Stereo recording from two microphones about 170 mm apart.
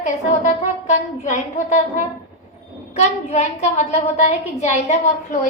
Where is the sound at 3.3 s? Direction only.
45° left (ahead or behind).